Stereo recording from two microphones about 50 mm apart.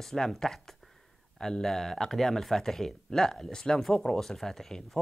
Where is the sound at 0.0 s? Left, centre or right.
Centre.